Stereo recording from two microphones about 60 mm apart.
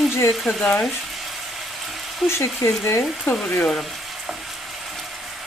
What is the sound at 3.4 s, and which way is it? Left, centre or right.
Speech, left.